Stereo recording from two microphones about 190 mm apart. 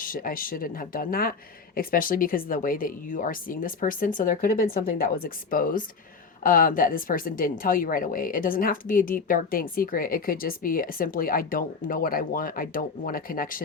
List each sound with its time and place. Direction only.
0.0 s speech: 45° left (ahead or behind)